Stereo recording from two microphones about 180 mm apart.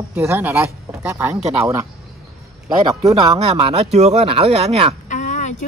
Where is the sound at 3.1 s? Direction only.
30° right (ahead or behind).